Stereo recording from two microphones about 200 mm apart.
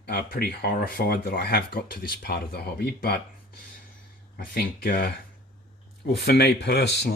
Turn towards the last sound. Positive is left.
turn(degrees=55)  # may be behind; listen again after turning